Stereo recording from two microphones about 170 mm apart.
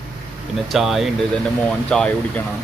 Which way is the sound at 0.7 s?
Centre (ahead or behind).